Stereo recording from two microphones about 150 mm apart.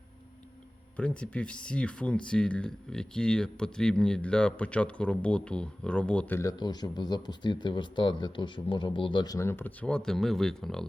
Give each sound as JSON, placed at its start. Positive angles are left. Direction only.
{"t": 0.9, "sound": "speech", "side_deg": 5}
{"t": 6.5, "sound": "speech", "side_deg": 25}